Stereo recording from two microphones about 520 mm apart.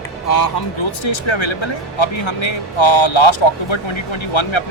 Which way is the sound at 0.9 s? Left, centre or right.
Left.